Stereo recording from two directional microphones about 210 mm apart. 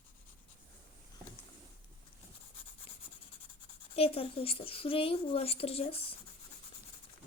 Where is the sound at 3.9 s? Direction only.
25° left (ahead or behind).